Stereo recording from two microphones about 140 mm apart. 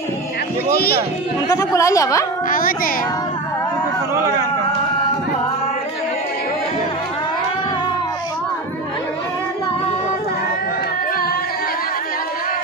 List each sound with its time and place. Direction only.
0.7 s speech: 90° left
1.5 s speech: 25° left (ahead or behind)
2.5 s a sound: 90° left
4.1 s speech: 20° right (ahead or behind)